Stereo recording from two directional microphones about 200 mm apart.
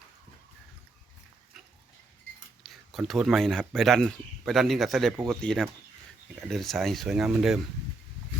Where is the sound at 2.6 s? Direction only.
Centre (ahead or behind).